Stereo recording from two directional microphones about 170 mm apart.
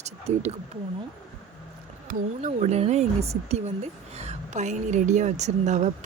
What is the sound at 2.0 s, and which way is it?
A woman's voice, 45° right (ahead or behind).